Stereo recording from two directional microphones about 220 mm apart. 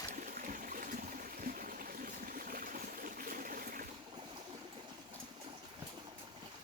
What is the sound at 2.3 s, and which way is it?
Stream, 40° right (ahead or behind).